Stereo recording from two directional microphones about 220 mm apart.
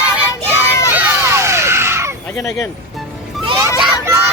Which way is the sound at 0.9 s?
10° right (ahead or behind).